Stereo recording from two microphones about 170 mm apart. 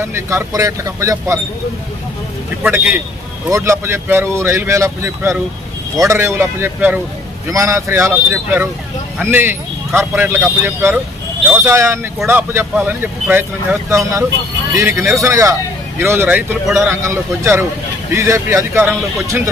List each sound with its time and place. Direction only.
0.0 s speech: 15° right (ahead or behind)
2.7 s speech: 10° right (ahead or behind)